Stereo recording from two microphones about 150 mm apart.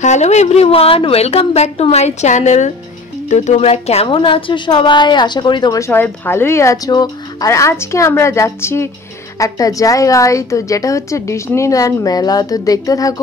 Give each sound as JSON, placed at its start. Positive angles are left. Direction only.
{"t": 0.0, "sound": "a woman's voice", "side_deg": 50}